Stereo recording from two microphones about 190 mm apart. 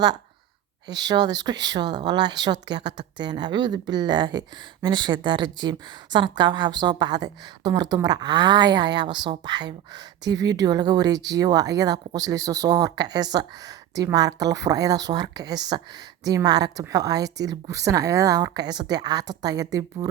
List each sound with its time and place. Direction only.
0.9 s speech: 20° right (ahead or behind)